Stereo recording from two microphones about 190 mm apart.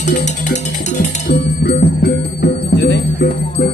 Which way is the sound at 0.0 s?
40° left (ahead or behind).